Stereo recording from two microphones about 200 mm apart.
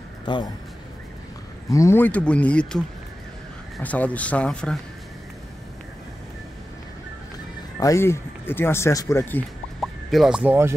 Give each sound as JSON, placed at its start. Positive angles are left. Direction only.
{"t": 0.2, "sound": "a sound", "side_deg": 20}
{"t": 1.7, "sound": "speech", "side_deg": 15}
{"t": 7.8, "sound": "speech", "side_deg": 15}
{"t": 10.1, "sound": "speech", "side_deg": -5}